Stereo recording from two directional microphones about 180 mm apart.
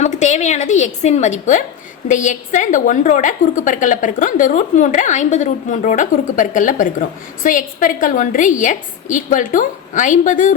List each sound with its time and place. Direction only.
0.0 s a woman's voice: 40° left (ahead or behind)